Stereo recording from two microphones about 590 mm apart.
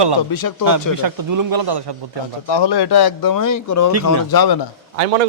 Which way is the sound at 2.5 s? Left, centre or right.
Left.